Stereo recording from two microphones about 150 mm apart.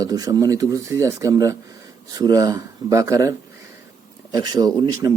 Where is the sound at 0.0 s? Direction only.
25° right (ahead or behind).